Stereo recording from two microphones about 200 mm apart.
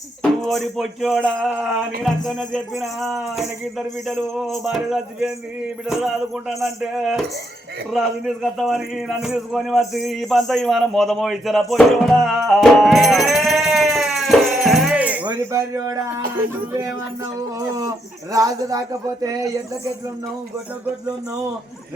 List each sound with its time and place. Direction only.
0.2 s speech: centre (ahead or behind)
6.5 s speech: centre (ahead or behind)
17.7 s speech: 15° right (ahead or behind)